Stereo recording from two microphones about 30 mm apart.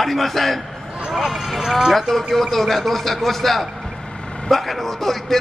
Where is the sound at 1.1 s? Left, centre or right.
Centre.